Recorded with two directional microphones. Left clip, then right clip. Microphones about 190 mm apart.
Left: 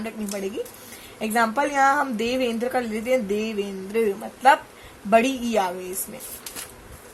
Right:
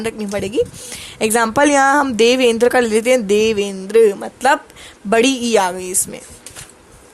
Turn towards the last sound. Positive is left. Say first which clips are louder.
# right 8 dB
turn(degrees=-55)  # may be behind; listen again after turning